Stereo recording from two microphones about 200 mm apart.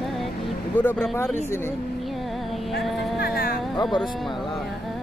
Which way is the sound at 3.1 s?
50° left (ahead or behind).